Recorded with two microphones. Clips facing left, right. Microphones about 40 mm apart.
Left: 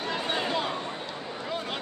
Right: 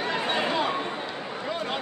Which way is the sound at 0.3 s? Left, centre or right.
Centre.